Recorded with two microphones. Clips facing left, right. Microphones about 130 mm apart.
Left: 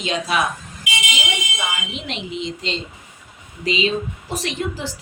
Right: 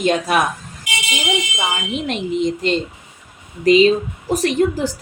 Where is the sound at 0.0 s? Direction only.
50° right (ahead or behind).